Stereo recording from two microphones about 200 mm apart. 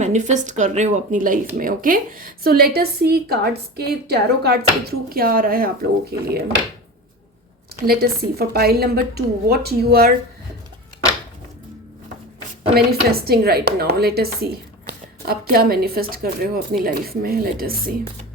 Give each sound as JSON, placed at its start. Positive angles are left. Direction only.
{"t": 0.0, "sound": "speech", "side_deg": -35}
{"t": 7.9, "sound": "speech", "side_deg": -50}
{"t": 12.7, "sound": "speech", "side_deg": -50}